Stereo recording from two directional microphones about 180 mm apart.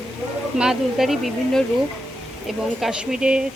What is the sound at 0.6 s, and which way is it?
Speech, centre (ahead or behind).